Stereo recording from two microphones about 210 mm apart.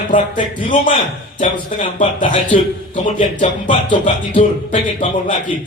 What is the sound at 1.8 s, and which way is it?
A man's voice, 35° left (ahead or behind).